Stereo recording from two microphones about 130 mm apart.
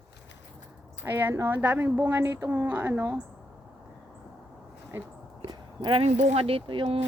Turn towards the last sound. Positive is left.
turn(degrees=-45)  # may be behind; listen again after turning